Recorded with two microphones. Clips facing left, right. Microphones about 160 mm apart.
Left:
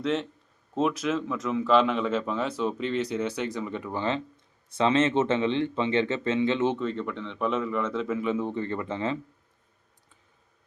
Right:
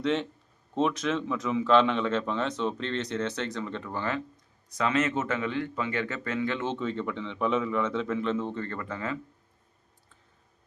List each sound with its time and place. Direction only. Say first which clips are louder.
0.0 s a man's voice: even; centre (ahead or behind)
4.7 s speech: left 4 dB; 25° left (ahead or behind)
6.7 s speech: left 1 dB; centre (ahead or behind); by 9.1 s 25° left (ahead or behind)